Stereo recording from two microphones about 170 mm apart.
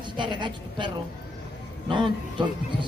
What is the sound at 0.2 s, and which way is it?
A man's voice, 25° right (ahead or behind).